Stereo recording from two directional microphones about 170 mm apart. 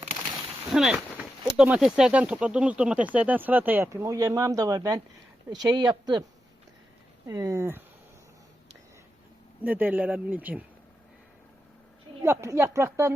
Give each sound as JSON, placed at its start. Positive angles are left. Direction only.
{"t": 0.7, "sound": "speech", "side_deg": -5}
{"t": 7.3, "sound": "speech", "side_deg": -20}
{"t": 9.6, "sound": "speech", "side_deg": -10}
{"t": 12.2, "sound": "speech", "side_deg": -15}